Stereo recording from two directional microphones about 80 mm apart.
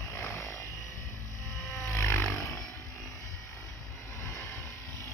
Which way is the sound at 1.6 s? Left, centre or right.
Left.